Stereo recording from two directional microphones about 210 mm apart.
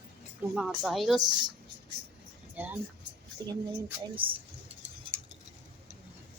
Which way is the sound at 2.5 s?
10° right (ahead or behind).